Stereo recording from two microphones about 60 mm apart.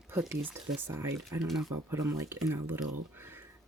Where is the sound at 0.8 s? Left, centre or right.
Right.